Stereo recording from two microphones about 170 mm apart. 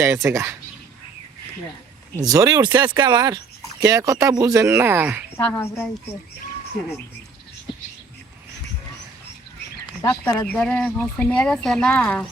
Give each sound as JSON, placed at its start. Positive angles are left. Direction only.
{"t": 0.0, "sound": "speech", "side_deg": -15}
{"t": 2.2, "sound": "speech", "side_deg": -20}
{"t": 5.4, "sound": "speech", "side_deg": 15}
{"t": 10.0, "sound": "speech", "side_deg": 15}